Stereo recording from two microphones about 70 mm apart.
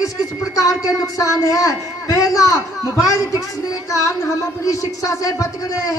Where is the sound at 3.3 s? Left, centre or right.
Left.